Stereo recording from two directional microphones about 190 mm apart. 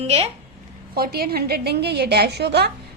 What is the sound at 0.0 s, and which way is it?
Speech, 30° right (ahead or behind).